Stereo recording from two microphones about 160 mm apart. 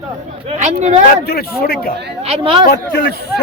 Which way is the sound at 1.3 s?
75° left (ahead or behind).